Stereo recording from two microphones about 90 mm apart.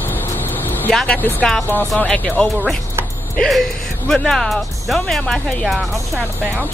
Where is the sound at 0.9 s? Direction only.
10° left (ahead or behind).